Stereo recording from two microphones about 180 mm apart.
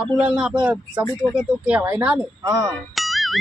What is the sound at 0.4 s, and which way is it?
Speech, 5° right (ahead or behind).